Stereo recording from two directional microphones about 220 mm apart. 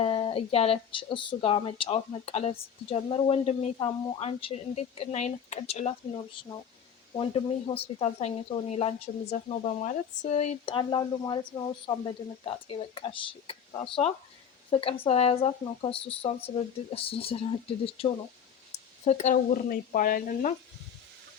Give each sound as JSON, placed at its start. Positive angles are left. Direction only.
{"t": 0.0, "sound": "speech", "side_deg": 25}